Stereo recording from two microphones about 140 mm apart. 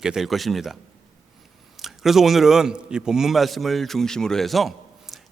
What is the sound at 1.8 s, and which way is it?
A man's voice, centre (ahead or behind).